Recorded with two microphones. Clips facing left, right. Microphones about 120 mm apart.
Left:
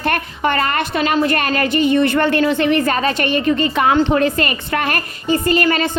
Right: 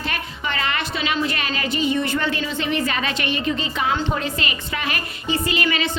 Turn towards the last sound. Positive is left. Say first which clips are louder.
# left 7 dB
turn(degrees=45)  # may be behind; listen again after turning